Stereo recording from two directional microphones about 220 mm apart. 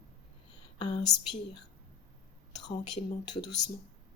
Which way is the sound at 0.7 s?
20° left (ahead or behind).